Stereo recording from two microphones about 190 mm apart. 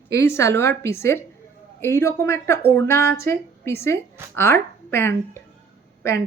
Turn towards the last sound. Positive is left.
turn(degrees=15)  # may be behind; listen again after turning